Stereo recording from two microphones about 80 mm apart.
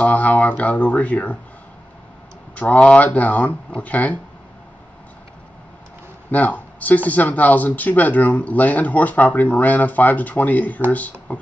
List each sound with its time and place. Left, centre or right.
0.0 s speech: centre
2.5 s speech: centre
6.3 s speech: centre